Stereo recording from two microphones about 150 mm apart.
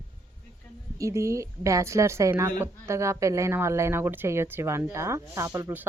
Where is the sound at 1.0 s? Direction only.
20° right (ahead or behind).